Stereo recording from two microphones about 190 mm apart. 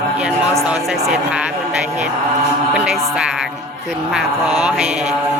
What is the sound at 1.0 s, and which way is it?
Speech, 5° right (ahead or behind).